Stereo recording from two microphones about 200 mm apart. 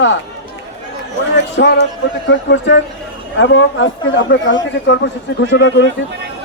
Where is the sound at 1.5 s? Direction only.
60° left (ahead or behind).